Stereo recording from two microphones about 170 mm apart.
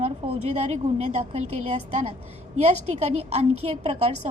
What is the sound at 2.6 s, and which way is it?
Speech, 40° right (ahead or behind).